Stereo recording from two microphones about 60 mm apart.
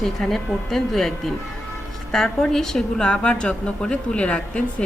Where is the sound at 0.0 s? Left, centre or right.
Centre.